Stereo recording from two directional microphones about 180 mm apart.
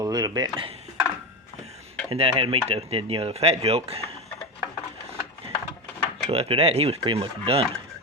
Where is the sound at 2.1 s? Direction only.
30° right (ahead or behind).